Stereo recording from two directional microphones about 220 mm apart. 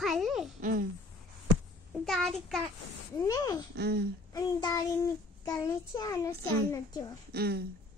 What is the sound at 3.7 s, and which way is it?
Speech, 50° right (ahead or behind).